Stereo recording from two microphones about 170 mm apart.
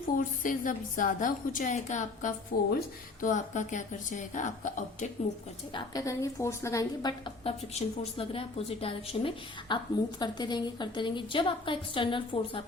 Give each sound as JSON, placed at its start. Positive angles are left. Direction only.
{"t": 0.2, "sound": "a woman's voice", "side_deg": 50}
{"t": 2.5, "sound": "speech", "side_deg": 60}
{"t": 3.2, "sound": "a woman's voice", "side_deg": 45}
{"t": 5.7, "sound": "a woman's voice", "side_deg": 20}
{"t": 7.4, "sound": "a woman's voice", "side_deg": 35}